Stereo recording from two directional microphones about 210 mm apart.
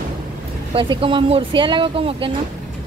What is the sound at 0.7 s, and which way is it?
Speech, 25° right (ahead or behind).